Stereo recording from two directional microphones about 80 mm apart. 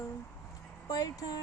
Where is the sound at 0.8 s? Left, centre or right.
Left.